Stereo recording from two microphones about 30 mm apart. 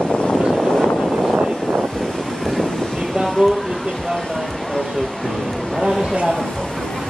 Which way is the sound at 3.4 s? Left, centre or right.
Centre.